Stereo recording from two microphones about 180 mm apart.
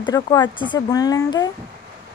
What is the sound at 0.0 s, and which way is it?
Speech, 25° left (ahead or behind).